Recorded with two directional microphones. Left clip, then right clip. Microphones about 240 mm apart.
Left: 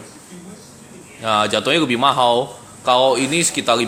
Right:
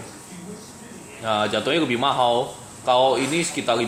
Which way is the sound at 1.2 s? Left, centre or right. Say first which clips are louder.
Left 5 dB; left.